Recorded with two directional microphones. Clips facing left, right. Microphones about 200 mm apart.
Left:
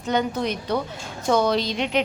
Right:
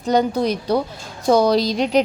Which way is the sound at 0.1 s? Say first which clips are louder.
Right 6 dB; 35° right (ahead or behind).